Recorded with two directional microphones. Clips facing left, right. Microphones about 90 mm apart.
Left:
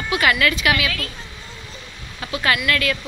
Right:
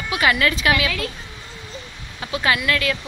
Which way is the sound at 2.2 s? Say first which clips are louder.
Even; 20° right (ahead or behind).